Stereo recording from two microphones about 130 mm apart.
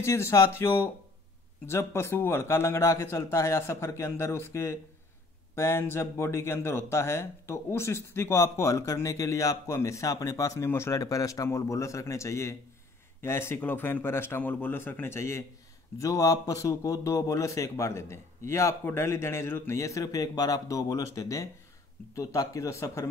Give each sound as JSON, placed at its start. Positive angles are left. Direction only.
{"t": 0.0, "sound": "speech", "side_deg": 20}